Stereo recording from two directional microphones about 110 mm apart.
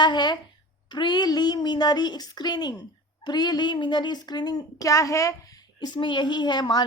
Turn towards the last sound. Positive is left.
turn(degrees=40)  # may be behind; listen again after turning